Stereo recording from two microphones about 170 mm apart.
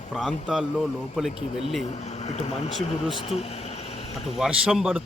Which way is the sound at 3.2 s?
35° left (ahead or behind).